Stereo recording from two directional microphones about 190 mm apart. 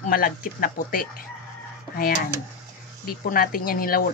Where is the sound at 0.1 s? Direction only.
50° left (ahead or behind).